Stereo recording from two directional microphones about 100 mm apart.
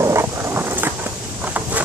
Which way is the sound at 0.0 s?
25° right (ahead or behind).